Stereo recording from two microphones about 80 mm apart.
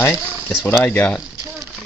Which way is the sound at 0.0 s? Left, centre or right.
Left.